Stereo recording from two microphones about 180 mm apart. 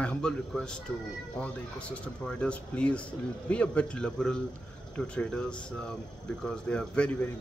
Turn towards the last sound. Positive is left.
turn(degrees=5)  # may be behind; listen again after turning